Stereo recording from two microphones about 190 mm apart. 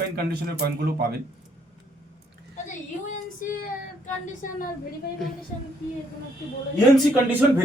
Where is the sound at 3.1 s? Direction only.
45° left (ahead or behind).